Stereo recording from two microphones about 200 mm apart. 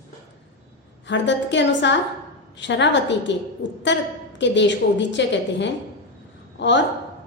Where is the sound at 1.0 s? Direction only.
60° left (ahead or behind).